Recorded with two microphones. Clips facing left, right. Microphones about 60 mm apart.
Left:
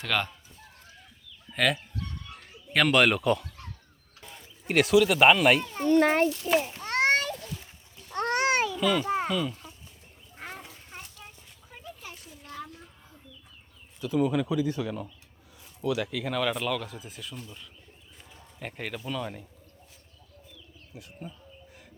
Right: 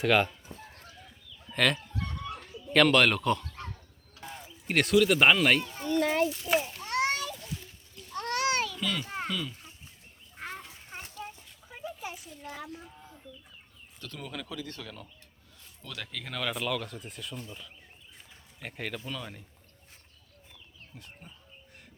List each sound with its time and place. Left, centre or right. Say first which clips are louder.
0.0 s speech: right 5 dB; centre
1.5 s speech: left 1 dB; centre
4.7 s speech: left 2 dB; centre
5.7 s a sound: left 6 dB; left
8.3 s a sound: left 3 dB; left
8.8 s a child's voice: left 8 dB; centre
9.1 s a sound: left 6 dB; centre
10.3 s duck: right 1 dB; centre
10.9 s horse: right 2 dB; right
11.2 s a sound: right 6 dB; centre
14.0 s speech: left 15 dB; centre
18.6 s speech: left 2 dB; centre
20.9 s speech: left 5 dB; centre